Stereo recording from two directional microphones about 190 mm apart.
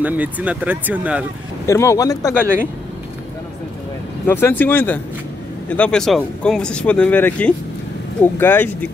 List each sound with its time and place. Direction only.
0.0 s speech: 5° right (ahead or behind)
1.7 s speech: 15° left (ahead or behind)
4.3 s speech: 10° left (ahead or behind)